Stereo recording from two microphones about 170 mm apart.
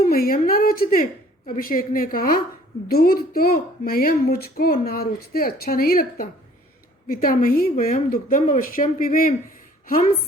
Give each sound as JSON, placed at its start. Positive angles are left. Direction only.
{"t": 0.0, "sound": "a woman's voice", "side_deg": 60}